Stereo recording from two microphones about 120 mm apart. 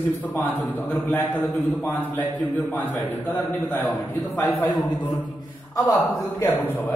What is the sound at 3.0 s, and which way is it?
Speech, 15° left (ahead or behind).